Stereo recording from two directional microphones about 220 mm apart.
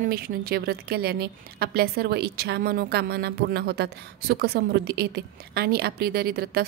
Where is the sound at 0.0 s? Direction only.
45° right (ahead or behind).